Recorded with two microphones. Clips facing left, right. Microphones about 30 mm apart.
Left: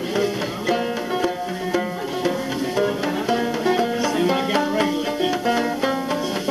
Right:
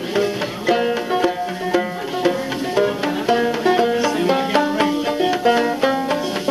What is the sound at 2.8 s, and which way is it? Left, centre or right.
Music, right.